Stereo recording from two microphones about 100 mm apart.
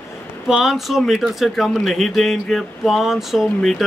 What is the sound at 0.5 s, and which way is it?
Speech, 5° right (ahead or behind).